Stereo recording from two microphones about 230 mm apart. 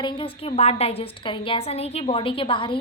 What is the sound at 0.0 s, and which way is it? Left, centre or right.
A woman's voice, left.